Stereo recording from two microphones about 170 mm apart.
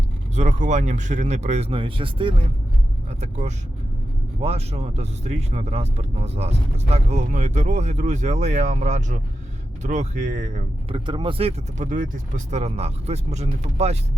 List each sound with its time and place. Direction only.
0.3 s speech: 45° right (ahead or behind)
4.4 s speech: 35° right (ahead or behind)
10.8 s speech: 30° right (ahead or behind)